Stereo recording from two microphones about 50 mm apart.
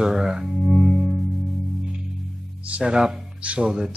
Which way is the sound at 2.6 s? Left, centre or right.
Right.